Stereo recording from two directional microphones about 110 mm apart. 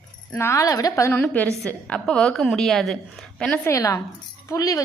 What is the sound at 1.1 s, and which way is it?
A woman's voice, 15° left (ahead or behind).